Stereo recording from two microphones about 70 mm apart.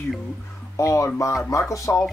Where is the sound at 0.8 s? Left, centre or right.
Left.